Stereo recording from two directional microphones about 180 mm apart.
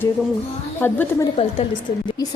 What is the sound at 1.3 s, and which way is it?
Speech, 35° left (ahead or behind).